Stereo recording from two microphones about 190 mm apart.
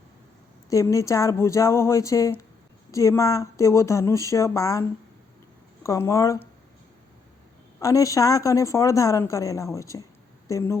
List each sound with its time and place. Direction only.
0.7 s a woman's voice: 15° left (ahead or behind)
7.8 s a woman's voice: 15° left (ahead or behind)